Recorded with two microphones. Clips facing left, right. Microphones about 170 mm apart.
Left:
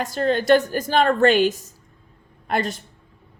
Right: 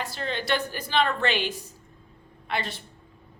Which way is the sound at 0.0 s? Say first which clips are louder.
Left 10 dB; 45° left (ahead or behind).